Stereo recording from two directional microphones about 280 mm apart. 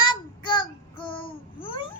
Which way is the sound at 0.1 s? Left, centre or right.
Centre.